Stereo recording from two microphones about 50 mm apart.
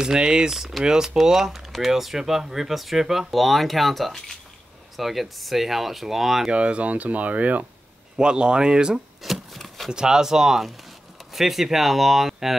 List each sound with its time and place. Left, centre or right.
0.0 s speech: centre
6.5 s speech: right
8.2 s speech: centre
9.2 s shuffling cards: centre
9.8 s speech: centre